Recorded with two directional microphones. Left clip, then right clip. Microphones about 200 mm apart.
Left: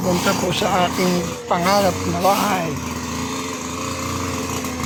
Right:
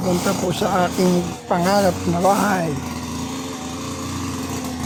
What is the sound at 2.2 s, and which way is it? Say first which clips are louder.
Speech: even; 40° right (ahead or behind).